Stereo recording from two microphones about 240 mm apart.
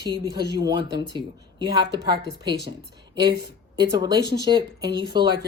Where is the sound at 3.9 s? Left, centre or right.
Centre.